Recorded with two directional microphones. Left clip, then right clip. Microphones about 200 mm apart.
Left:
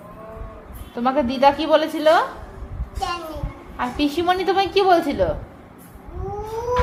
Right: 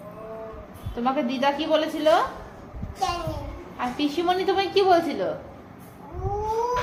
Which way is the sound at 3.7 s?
45° left (ahead or behind).